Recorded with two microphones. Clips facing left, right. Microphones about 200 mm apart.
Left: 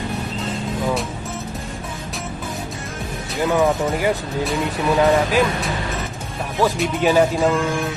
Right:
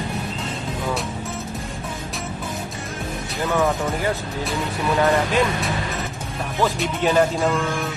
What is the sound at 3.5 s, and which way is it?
Speech, 15° left (ahead or behind).